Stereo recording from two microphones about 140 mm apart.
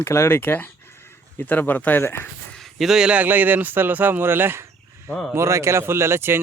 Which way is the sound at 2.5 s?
Centre (ahead or behind).